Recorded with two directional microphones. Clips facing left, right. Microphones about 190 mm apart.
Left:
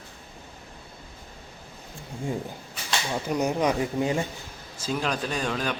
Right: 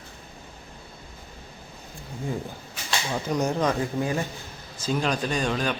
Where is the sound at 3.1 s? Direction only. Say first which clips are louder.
Even; 10° left (ahead or behind).